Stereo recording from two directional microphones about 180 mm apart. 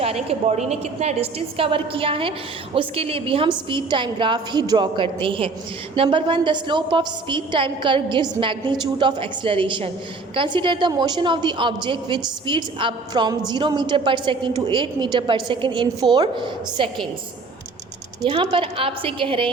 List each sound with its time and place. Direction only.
0.0 s a woman's voice: 35° right (ahead or behind)
18.3 s a woman's voice: 30° right (ahead or behind)